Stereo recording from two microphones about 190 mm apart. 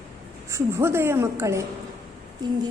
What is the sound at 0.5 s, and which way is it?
A woman's voice, 15° right (ahead or behind).